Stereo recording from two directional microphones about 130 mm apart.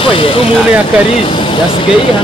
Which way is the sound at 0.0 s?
45° left (ahead or behind).